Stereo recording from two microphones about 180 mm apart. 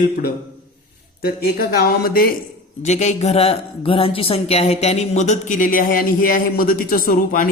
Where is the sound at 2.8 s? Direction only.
40° left (ahead or behind).